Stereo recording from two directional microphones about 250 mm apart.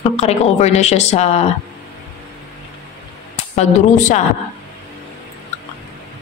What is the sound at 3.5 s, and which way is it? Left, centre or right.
Speech, left.